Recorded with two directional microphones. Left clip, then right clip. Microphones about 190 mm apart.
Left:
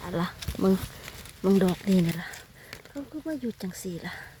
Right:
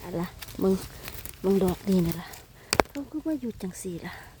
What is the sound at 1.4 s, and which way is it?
Speech, centre (ahead or behind).